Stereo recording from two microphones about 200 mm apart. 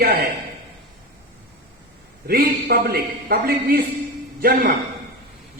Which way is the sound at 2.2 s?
50° right (ahead or behind).